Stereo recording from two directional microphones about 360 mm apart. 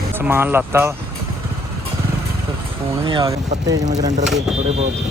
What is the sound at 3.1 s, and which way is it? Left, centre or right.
Speech, centre.